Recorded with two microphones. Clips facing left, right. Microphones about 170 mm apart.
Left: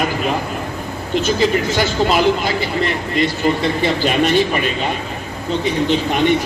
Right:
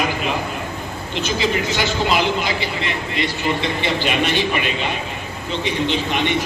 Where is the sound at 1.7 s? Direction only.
45° left (ahead or behind).